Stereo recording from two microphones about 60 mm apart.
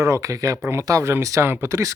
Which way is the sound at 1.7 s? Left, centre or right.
Right.